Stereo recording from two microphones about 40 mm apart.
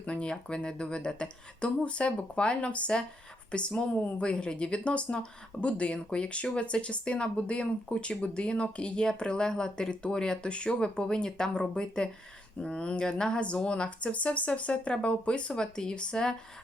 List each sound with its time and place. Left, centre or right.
0.0 s speech: left